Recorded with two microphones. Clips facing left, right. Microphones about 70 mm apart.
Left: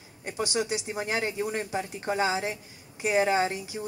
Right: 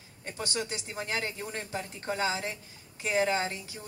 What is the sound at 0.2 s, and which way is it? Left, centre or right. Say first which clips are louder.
Speech: left 6 dB; centre.